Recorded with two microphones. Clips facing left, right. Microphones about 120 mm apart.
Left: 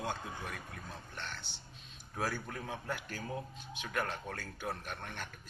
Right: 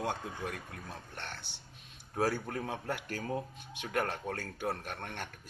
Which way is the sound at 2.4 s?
45° right (ahead or behind).